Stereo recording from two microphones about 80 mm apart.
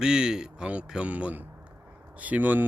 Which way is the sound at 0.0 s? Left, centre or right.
Centre.